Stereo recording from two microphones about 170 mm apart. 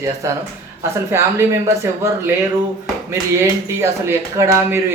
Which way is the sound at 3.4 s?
15° right (ahead or behind).